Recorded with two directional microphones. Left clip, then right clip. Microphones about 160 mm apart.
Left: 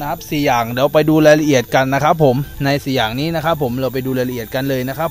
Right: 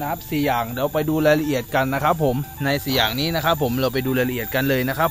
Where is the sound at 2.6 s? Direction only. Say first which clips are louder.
Left 4 dB; 45° left (ahead or behind).